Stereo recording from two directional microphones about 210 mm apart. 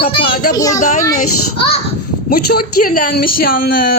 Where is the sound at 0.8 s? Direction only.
35° left (ahead or behind).